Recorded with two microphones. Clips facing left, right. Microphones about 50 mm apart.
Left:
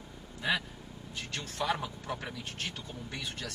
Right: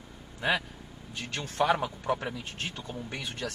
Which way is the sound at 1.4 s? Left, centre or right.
Right.